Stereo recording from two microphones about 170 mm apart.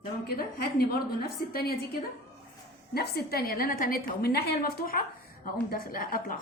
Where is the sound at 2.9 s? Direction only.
70° left (ahead or behind).